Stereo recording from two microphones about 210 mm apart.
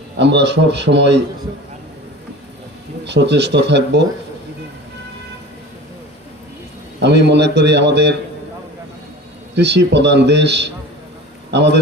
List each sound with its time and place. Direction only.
0.2 s a man's voice: 55° right (ahead or behind)
3.0 s a man's voice: 55° right (ahead or behind)
7.0 s a man's voice: 55° right (ahead or behind)
9.6 s a man's voice: 55° right (ahead or behind)